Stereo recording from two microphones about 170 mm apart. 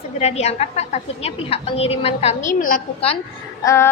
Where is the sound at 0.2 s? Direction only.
40° left (ahead or behind).